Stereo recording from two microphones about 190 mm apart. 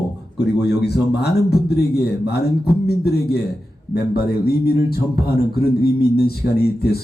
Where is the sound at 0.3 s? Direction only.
60° left (ahead or behind).